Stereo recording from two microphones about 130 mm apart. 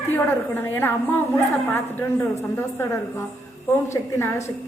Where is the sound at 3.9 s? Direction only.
25° left (ahead or behind).